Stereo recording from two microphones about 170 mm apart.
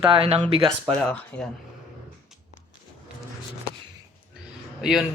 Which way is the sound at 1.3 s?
10° left (ahead or behind).